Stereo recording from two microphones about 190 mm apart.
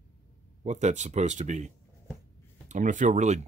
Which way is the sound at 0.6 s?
40° right (ahead or behind).